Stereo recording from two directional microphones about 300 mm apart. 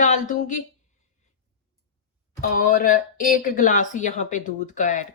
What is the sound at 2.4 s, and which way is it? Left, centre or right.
A woman's voice, left.